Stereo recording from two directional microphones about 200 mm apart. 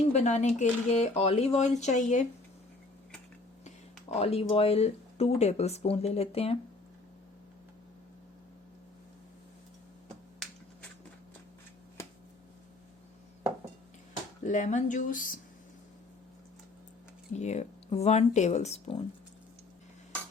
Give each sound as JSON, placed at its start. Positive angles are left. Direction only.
{"t": 0.1, "sound": "speech", "side_deg": 35}
{"t": 4.1, "sound": "speech", "side_deg": 30}
{"t": 10.4, "sound": "finger snapping", "side_deg": 0}
{"t": 14.4, "sound": "speech", "side_deg": 35}
{"t": 17.3, "sound": "speech", "side_deg": 35}